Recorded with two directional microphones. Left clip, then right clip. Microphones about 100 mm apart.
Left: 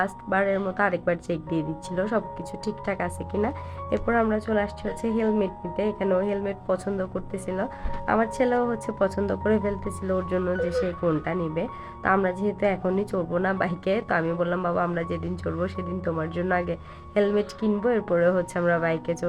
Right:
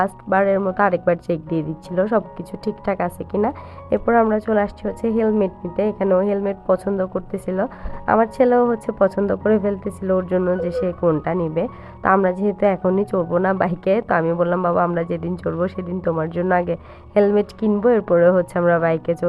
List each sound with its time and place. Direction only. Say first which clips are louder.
0.3 s a woman's voice: right 7 dB; 20° left (ahead or behind)
2.0 s a woman's voice: right 6 dB; 10° left (ahead or behind)
11.0 s a woman's voice: right 7 dB; 20° left (ahead or behind)
15.6 s a woman's voice: right 7 dB; 10° left (ahead or behind)